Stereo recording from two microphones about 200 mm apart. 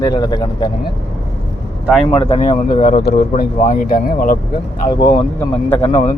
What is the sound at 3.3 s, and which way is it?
Speech, 40° left (ahead or behind).